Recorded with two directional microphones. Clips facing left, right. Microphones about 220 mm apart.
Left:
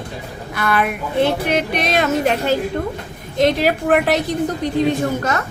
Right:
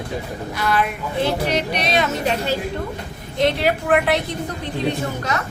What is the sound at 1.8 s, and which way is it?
Speech, 50° left (ahead or behind).